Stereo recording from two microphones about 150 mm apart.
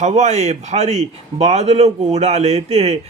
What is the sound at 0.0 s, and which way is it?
A man's voice, 50° right (ahead or behind).